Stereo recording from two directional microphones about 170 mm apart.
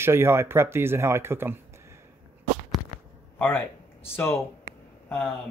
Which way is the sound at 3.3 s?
10° left (ahead or behind).